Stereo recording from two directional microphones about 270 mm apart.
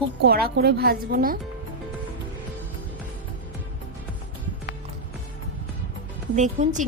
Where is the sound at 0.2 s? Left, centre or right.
Right.